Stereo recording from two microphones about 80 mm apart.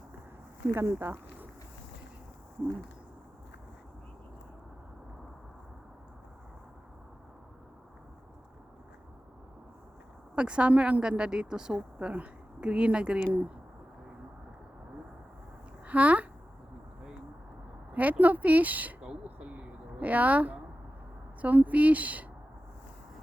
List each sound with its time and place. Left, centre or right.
0.7 s speech: right
10.3 s speech: centre
15.9 s speech: centre
17.9 s speech: centre